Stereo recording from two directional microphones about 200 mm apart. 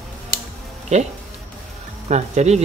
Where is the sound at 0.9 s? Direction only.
35° right (ahead or behind).